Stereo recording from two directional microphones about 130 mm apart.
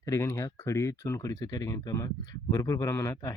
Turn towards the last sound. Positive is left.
turn(degrees=20)  # may be behind; listen again after turning